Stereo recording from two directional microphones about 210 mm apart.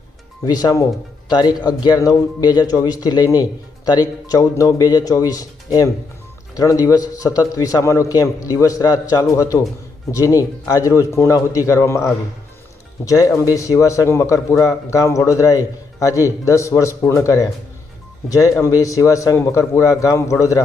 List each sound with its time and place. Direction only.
0.4 s speech: 20° left (ahead or behind)